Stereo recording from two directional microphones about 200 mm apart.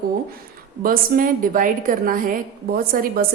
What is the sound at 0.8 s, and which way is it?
Speech, 45° right (ahead or behind).